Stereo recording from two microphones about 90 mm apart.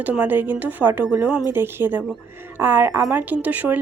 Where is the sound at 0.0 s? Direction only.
20° right (ahead or behind).